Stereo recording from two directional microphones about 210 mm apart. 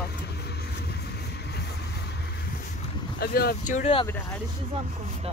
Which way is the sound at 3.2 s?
45° left (ahead or behind).